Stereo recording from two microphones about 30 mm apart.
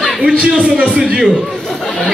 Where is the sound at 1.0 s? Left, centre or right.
Right.